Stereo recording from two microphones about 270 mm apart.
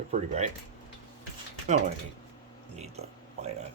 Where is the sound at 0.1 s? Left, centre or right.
Right.